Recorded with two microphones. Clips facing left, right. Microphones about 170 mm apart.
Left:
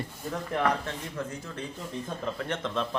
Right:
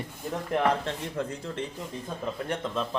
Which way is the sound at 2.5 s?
5° right (ahead or behind).